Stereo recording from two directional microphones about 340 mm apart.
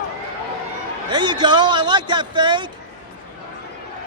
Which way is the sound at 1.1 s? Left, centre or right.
Centre.